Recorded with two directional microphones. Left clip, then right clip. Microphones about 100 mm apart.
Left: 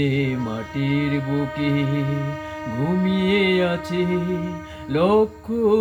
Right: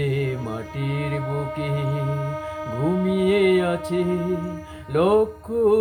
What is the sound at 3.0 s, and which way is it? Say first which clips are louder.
Music: right 1 dB; 35° right (ahead or behind).